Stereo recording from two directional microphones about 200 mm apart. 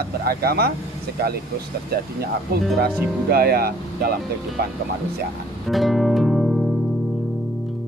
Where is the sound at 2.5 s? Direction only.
50° right (ahead or behind).